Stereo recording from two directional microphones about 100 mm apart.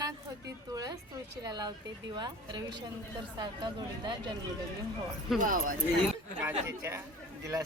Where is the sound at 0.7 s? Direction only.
40° right (ahead or behind).